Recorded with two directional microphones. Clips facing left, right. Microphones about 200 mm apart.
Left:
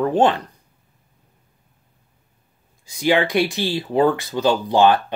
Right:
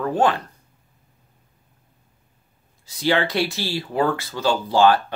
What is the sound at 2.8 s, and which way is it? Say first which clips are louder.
Speech: left 3 dB; 15° left (ahead or behind).